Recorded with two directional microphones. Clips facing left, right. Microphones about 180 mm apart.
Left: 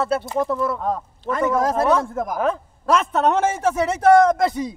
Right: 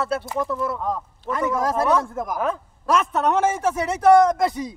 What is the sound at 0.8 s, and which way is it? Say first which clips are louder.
Speech: left 2 dB; 55° left (ahead or behind).